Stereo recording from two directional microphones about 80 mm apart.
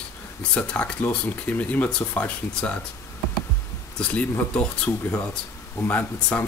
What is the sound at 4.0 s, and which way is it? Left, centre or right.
Speech, centre.